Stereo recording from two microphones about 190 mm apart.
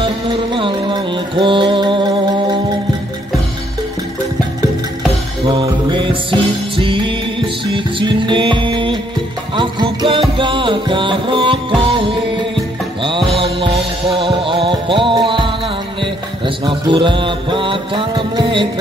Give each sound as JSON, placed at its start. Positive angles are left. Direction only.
{"t": 0.0, "sound": "music", "side_deg": -25}
{"t": 5.5, "sound": "mantra", "side_deg": -25}
{"t": 6.8, "sound": "music", "side_deg": -25}
{"t": 13.4, "sound": "music", "side_deg": -25}